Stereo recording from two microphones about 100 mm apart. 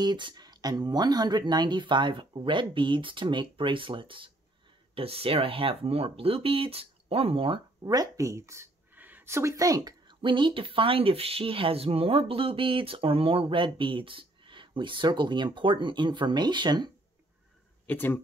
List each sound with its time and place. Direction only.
0.0 s speech: 50° right (ahead or behind)
4.9 s speech: 70° right (ahead or behind)
7.8 s speech: 40° right (ahead or behind)
8.9 s a sound: 20° right (ahead or behind); by 10.1 s 40° right (ahead or behind)
10.2 s speech: 55° right (ahead or behind)
17.8 s speech: 20° left (ahead or behind)